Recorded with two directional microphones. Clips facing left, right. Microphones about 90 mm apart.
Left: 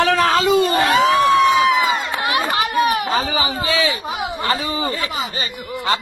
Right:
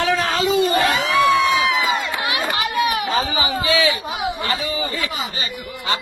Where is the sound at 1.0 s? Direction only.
45° left (ahead or behind).